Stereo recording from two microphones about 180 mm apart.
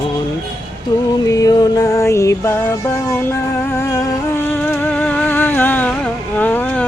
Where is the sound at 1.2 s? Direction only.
20° left (ahead or behind).